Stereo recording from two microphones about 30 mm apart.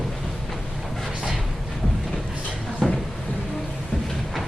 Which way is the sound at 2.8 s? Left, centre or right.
Centre.